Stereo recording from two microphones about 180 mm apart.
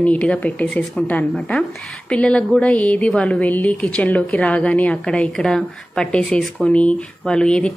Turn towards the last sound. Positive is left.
turn(degrees=5)  # may be behind; listen again after turning